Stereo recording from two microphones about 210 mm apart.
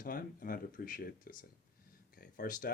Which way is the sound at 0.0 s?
40° left (ahead or behind).